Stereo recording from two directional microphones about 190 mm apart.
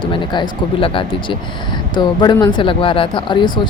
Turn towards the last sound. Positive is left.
turn(degrees=25)  # may be behind; listen again after turning